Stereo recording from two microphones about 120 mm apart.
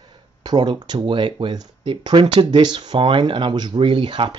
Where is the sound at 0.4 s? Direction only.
40° right (ahead or behind).